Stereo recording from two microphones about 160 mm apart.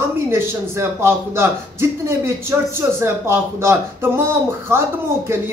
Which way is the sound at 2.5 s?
15° right (ahead or behind).